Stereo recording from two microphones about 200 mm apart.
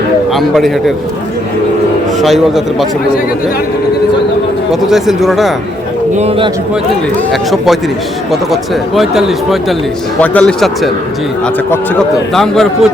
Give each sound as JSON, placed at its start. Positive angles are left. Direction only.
{"t": 0.3, "sound": "speech", "side_deg": 0}
{"t": 2.2, "sound": "speech", "side_deg": 0}
{"t": 4.7, "sound": "speech", "side_deg": 0}
{"t": 6.1, "sound": "a man's voice", "side_deg": -30}
{"t": 7.5, "sound": "speech", "side_deg": 0}
{"t": 12.3, "sound": "speech", "side_deg": 0}